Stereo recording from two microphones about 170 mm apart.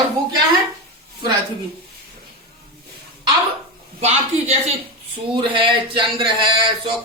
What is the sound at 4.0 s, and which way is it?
A woman's voice, 40° right (ahead or behind).